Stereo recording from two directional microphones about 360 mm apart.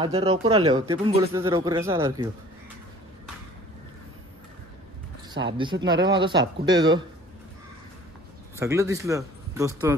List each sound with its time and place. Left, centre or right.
0.0 s speech: centre
5.6 s speech: centre
5.9 s speech: right
6.1 s speech: centre
8.5 s speech: centre